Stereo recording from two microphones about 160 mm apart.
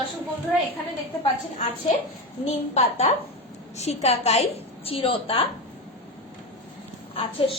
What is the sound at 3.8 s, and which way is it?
A woman's voice, 40° left (ahead or behind).